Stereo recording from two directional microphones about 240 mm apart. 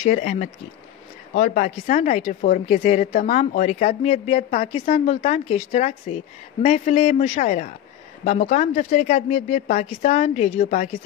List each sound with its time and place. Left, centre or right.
0.0 s speech: left